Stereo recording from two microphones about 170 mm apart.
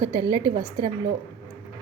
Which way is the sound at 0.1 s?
25° right (ahead or behind).